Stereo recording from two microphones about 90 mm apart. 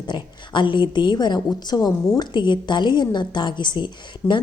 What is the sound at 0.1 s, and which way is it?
Speech, 60° left (ahead or behind).